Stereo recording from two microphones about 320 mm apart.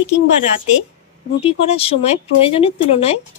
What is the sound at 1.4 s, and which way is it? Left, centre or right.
Speech, centre.